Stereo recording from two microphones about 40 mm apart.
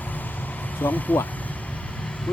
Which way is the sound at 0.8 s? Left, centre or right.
Left.